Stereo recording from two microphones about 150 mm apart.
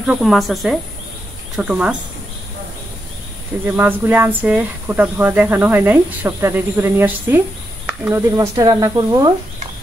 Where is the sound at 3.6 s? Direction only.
15° right (ahead or behind).